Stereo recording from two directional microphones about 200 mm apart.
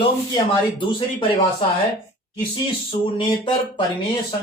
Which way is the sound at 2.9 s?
25° left (ahead or behind).